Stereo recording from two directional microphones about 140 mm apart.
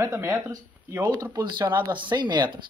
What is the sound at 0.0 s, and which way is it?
Speech, 20° right (ahead or behind).